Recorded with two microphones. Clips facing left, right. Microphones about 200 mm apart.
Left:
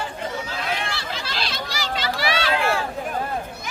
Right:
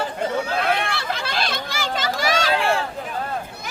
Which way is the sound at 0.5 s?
60° right (ahead or behind).